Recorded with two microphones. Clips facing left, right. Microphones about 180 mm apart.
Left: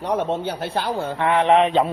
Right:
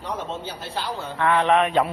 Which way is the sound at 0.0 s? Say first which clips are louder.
Left 8 dB; 60° left (ahead or behind).